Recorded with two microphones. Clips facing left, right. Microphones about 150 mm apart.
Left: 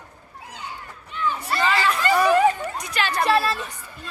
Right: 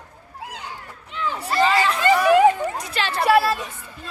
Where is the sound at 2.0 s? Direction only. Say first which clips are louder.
Right 3 dB; 20° right (ahead or behind).